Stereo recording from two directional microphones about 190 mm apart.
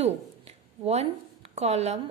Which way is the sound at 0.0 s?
35° right (ahead or behind).